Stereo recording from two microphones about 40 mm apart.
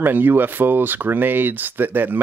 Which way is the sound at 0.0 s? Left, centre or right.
Right.